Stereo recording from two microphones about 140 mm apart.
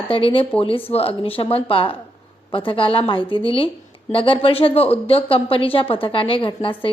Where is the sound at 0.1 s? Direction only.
40° left (ahead or behind).